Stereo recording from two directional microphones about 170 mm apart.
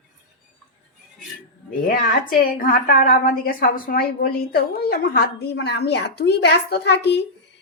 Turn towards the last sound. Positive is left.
turn(degrees=75)  # may be behind; listen again after turning